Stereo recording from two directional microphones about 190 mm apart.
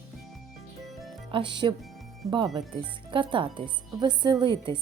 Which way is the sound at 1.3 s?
25° right (ahead or behind).